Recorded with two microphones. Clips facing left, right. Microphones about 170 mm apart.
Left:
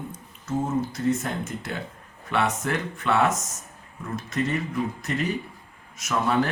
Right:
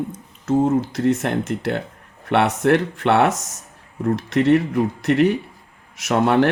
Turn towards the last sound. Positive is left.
turn(degrees=-75)  # may be behind; listen again after turning